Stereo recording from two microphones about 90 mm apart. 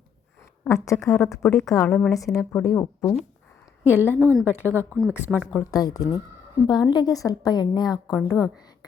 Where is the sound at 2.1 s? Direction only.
40° left (ahead or behind).